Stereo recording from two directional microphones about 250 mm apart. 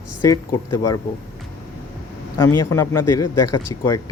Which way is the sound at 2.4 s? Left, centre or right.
Centre.